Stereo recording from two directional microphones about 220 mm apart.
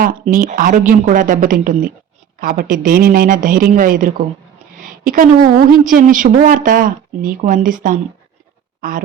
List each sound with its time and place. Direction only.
0.0 s a woman's voice: 40° right (ahead or behind)